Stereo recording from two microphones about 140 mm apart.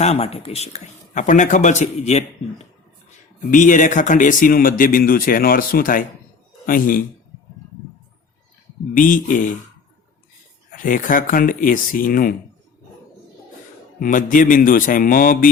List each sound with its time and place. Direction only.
0.0 s speech: 45° left (ahead or behind)
3.5 s speech: 65° left (ahead or behind); by 7.0 s 80° left
9.0 s speech: 75° left (ahead or behind)
10.7 s speech: 75° left (ahead or behind)
14.0 s speech: 75° left (ahead or behind)